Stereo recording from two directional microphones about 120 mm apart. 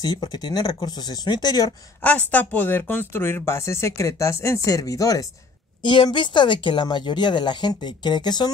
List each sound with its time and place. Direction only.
0.0 s a woman's voice: 35° left (ahead or behind)
2.0 s speech: 10° left (ahead or behind); by 5.2 s 30° left (ahead or behind)
5.8 s a woman's voice: 40° left (ahead or behind)